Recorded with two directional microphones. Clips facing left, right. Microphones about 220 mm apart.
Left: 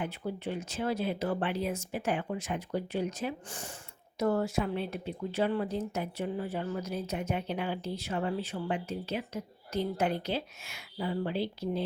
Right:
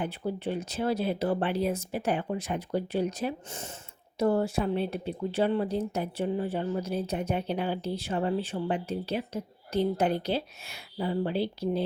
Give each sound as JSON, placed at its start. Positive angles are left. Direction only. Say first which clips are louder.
{"t": 0.0, "sound": "speech", "louder": "right 4 dB", "side_deg": -30}